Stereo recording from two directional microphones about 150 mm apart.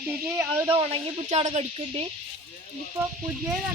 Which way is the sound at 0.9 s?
45° right (ahead or behind).